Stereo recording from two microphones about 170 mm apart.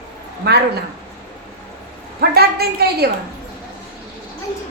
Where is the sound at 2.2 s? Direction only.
70° right (ahead or behind).